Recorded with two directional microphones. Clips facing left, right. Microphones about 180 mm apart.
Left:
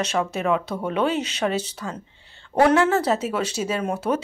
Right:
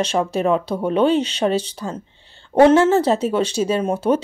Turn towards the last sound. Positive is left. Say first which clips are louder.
# right 5 dB
turn(degrees=-25)  # may be behind; listen again after turning